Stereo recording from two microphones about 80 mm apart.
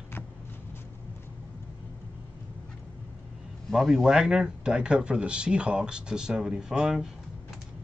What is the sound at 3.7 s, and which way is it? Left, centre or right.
Speech, centre.